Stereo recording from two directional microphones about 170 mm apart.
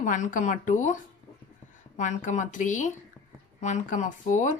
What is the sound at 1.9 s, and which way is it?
Speech, 45° left (ahead or behind).